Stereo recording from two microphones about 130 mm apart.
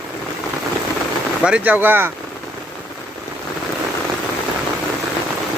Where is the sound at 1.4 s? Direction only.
10° right (ahead or behind).